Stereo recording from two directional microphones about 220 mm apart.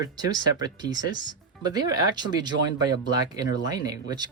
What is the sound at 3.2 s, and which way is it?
Speech, 15° right (ahead or behind).